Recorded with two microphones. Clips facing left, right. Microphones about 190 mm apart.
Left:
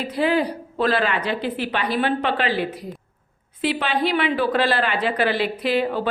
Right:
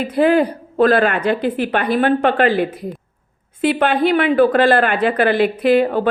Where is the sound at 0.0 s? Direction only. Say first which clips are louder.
Right 6 dB; 50° right (ahead or behind).